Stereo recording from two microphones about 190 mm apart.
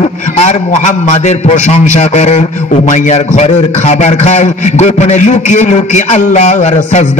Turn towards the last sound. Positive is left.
turn(degrees=40)  # may be behind; listen again after turning